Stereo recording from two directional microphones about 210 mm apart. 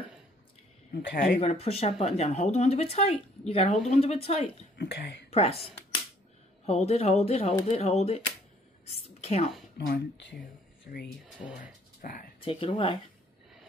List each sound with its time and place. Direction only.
0.9 s speech: 40° left (ahead or behind)
4.7 s speech: 55° left (ahead or behind)
5.3 s speech: 30° left (ahead or behind)
8.8 s a sound: 30° left (ahead or behind)
9.8 s speech: 50° left (ahead or behind)
11.2 s speech: 5° right (ahead or behind)
12.0 s speech: 40° left (ahead or behind)
12.4 s speech: 25° left (ahead or behind)